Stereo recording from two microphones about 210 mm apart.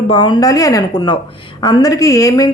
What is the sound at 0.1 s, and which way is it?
A woman's voice, 20° left (ahead or behind).